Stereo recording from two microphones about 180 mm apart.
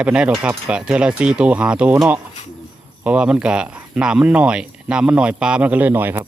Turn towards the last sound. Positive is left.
turn(degrees=-10)  # may be behind; listen again after turning